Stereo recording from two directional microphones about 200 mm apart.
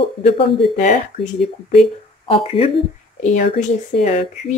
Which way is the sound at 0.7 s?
40° left (ahead or behind).